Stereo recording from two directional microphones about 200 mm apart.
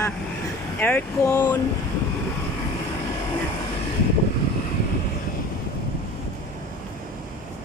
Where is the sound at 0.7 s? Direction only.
10° left (ahead or behind).